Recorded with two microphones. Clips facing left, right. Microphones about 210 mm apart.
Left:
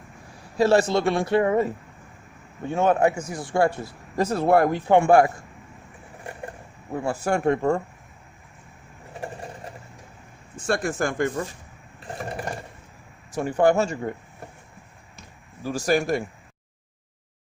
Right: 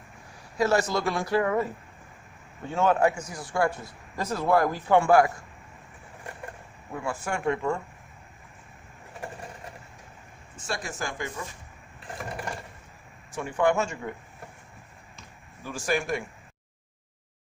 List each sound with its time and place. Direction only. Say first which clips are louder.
0.5 s speech: left 5 dB; 30° left (ahead or behind)
2.6 s speech: left 3 dB; 20° left (ahead or behind)
6.9 s speech: left 7 dB; 35° left (ahead or behind)
10.7 s speech: left 9 dB; 55° left (ahead or behind)
13.3 s speech: left 5 dB; 40° left (ahead or behind)
15.6 s speech: left 6 dB; 40° left (ahead or behind)